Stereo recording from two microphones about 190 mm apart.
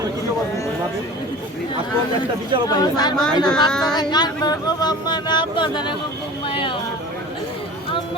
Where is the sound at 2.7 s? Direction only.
20° left (ahead or behind).